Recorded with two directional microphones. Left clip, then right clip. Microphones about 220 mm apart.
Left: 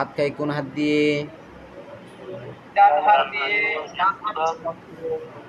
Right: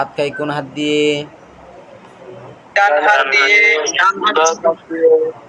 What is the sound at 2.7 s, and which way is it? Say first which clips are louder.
A man's voice: right 4 dB; 40° right (ahead or behind).